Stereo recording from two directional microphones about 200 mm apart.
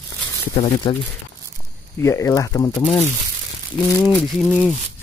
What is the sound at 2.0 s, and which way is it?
Speech, 15° left (ahead or behind).